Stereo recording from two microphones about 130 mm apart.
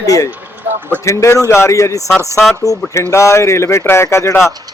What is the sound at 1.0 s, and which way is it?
Speech, 25° left (ahead or behind).